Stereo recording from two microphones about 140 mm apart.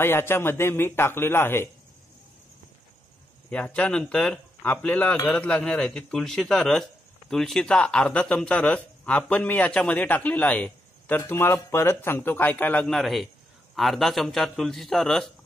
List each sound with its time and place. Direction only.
0.0 s speech: 15° left (ahead or behind)
3.4 s speech: 10° left (ahead or behind)
12.8 s a man's voice: centre (ahead or behind)